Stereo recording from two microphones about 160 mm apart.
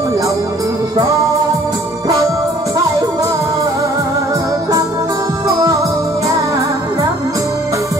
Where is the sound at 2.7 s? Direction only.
20° right (ahead or behind).